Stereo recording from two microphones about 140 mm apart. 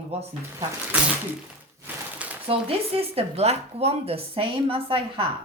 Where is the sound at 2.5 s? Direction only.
45° right (ahead or behind).